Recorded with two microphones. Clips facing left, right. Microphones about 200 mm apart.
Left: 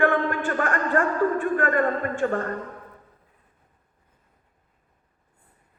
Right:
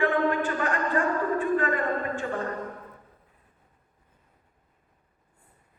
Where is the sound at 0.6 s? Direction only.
50° left (ahead or behind).